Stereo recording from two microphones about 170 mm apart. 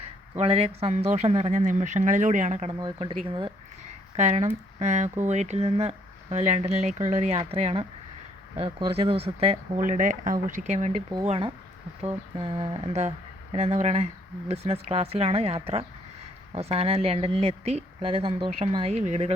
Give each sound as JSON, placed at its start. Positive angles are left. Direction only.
{"t": 0.3, "sound": "speech", "side_deg": -35}
{"t": 2.7, "sound": "speech", "side_deg": -25}
{"t": 4.2, "sound": "speech", "side_deg": -40}
{"t": 11.3, "sound": "speech", "side_deg": -30}